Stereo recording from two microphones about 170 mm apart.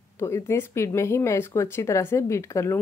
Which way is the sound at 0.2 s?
15° left (ahead or behind).